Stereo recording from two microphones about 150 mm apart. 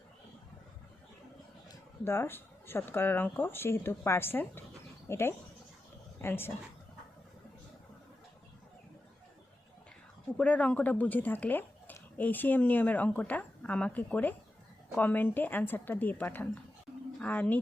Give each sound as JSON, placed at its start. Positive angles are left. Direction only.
{"t": 2.0, "sound": "speech", "side_deg": 15}
{"t": 10.3, "sound": "speech", "side_deg": 10}